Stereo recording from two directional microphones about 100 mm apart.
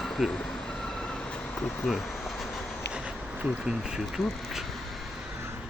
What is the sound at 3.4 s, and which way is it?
Speech, 5° right (ahead or behind).